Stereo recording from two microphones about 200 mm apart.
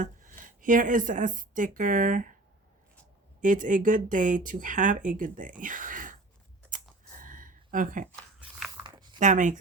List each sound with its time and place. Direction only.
0.0 s speech: 40° right (ahead or behind)
3.4 s speech: 40° right (ahead or behind)
6.7 s computer keyboard: 40° right (ahead or behind)
8.1 s a sound: centre (ahead or behind)
9.1 s speech: 40° right (ahead or behind)